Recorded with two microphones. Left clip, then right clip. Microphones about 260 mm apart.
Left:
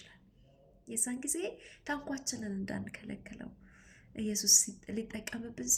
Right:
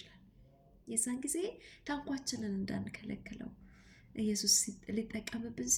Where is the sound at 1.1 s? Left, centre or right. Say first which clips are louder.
Right 1 dB; centre.